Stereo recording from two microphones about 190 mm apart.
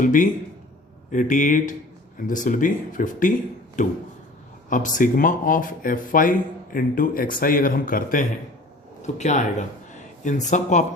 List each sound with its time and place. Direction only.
0.0 s speech: 45° left (ahead or behind)